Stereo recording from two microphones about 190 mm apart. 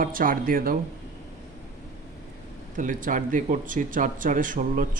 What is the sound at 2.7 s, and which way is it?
Speech, 45° right (ahead or behind).